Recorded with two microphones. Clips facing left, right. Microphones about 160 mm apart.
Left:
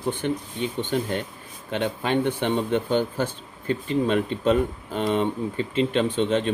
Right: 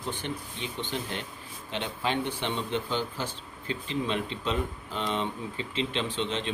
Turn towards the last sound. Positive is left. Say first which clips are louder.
# left 9 dB
turn(degrees=50)  # may be behind; listen again after turning